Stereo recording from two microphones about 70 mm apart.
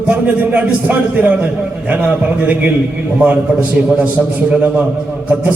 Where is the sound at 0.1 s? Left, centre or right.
Right.